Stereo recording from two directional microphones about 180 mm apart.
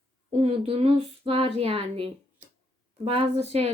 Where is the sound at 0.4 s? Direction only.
35° right (ahead or behind).